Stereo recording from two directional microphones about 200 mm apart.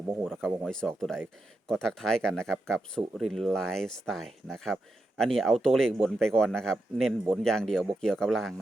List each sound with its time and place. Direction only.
0.3 s speech: centre (ahead or behind)